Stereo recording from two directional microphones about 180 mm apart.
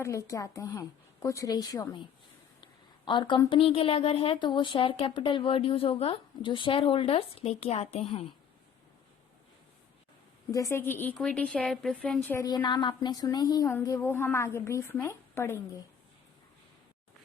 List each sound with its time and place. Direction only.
0.0 s a woman's voice: 15° left (ahead or behind)
3.1 s speech: 25° left (ahead or behind)
10.5 s a woman's voice: 15° left (ahead or behind)
12.5 s a woman's voice: 25° left (ahead or behind)